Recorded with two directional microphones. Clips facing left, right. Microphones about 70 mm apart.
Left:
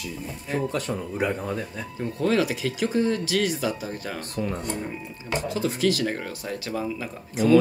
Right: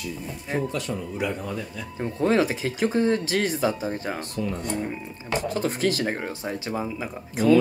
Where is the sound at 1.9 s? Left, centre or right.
Right.